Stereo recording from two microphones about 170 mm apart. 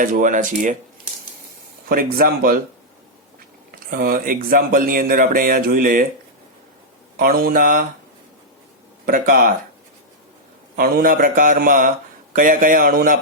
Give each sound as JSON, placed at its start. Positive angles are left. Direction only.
{"t": 0.0, "sound": "a man's voice", "side_deg": -50}
{"t": 1.9, "sound": "speech", "side_deg": -60}
{"t": 3.9, "sound": "speech", "side_deg": -60}
{"t": 7.2, "sound": "speech", "side_deg": -60}
{"t": 9.0, "sound": "a man's voice", "side_deg": -55}
{"t": 10.8, "sound": "a man's voice", "side_deg": -60}